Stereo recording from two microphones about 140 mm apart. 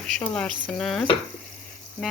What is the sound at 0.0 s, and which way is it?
Speech, 5° left (ahead or behind).